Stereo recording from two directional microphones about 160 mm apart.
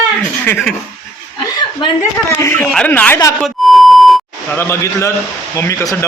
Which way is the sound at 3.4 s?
Centre (ahead or behind).